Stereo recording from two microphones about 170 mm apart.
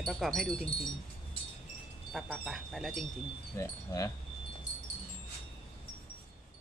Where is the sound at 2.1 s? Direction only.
Centre (ahead or behind).